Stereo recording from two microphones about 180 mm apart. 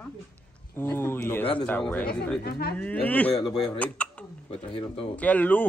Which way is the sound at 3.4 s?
20° left (ahead or behind).